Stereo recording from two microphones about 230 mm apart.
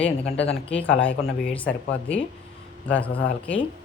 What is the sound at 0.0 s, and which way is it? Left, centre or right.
Speech, left.